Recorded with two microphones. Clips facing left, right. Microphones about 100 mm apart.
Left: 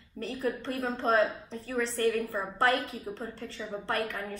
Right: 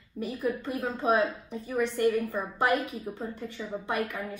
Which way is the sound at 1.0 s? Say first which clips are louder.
Even; 15° right (ahead or behind).